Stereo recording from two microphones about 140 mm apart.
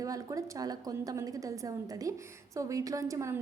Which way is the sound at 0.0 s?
25° right (ahead or behind).